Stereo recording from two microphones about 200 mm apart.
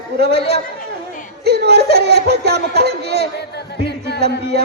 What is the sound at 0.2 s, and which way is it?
A man's voice, 55° right (ahead or behind).